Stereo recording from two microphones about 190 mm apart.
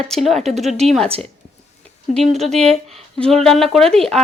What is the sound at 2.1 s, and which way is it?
Speech, centre (ahead or behind).